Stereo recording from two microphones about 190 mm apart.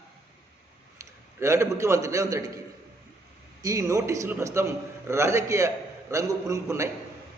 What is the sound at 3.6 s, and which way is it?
A man's voice, 15° right (ahead or behind).